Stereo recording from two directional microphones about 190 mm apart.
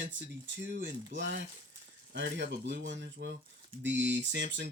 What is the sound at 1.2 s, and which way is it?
Speech, 70° right (ahead or behind).